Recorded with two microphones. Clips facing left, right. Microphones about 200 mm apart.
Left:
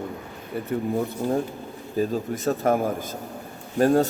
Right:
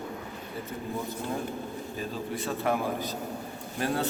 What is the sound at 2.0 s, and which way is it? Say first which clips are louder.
A man's voice: left 10 dB; 45° left (ahead or behind).